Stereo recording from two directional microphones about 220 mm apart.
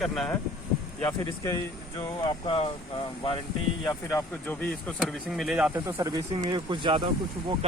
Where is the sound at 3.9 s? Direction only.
10° left (ahead or behind).